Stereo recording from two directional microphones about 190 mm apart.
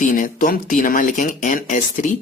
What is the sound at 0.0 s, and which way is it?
Speech, 45° left (ahead or behind).